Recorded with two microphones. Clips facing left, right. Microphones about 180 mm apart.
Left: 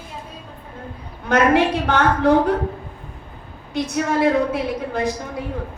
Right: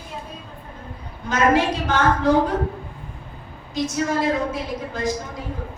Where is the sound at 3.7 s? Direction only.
60° left (ahead or behind).